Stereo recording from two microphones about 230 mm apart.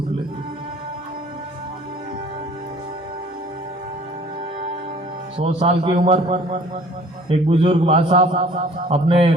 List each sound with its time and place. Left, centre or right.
5.4 s a man's voice: right